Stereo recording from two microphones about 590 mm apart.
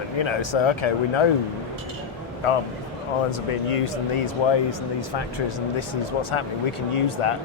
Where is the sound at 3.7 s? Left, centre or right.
Left.